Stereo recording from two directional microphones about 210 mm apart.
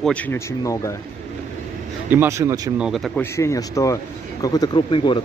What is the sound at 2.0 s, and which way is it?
Speech, 10° right (ahead or behind).